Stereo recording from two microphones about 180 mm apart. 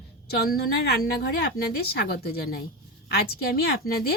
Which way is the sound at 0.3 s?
60° left (ahead or behind).